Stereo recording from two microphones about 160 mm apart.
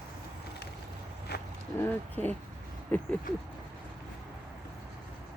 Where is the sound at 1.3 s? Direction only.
90° left.